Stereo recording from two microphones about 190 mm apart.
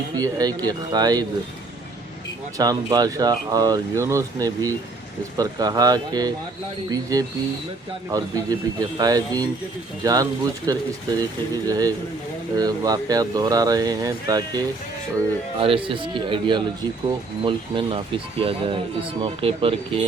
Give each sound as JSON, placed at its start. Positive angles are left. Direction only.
{"t": 0.1, "sound": "speech", "side_deg": -20}
{"t": 2.6, "sound": "speech", "side_deg": -20}